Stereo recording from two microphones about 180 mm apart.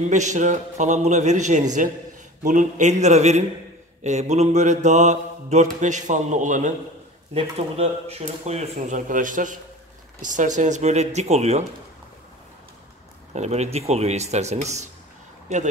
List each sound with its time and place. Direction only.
0.1 s mantra: 40° right (ahead or behind)
7.3 s mantra: 35° right (ahead or behind)
13.3 s mantra: 40° right (ahead or behind)